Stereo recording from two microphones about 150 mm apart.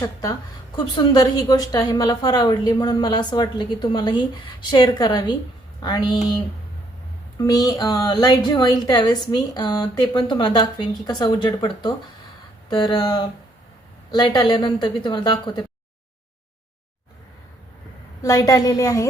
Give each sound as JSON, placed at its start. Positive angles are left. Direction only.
{"t": 0.0, "sound": "a woman's voice", "side_deg": 25}
{"t": 7.4, "sound": "a woman's voice", "side_deg": 25}
{"t": 18.2, "sound": "a woman's voice", "side_deg": 25}